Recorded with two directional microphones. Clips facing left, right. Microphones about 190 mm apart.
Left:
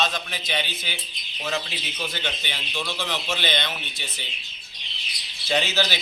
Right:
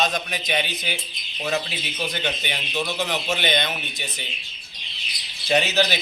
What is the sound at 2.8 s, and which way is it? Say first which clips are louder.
Speech: right 4 dB; 20° right (ahead or behind).